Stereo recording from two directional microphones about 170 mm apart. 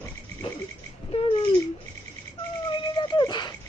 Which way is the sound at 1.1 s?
35° left (ahead or behind).